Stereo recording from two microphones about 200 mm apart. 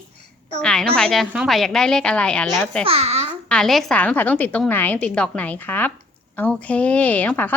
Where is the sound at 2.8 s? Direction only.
30° right (ahead or behind).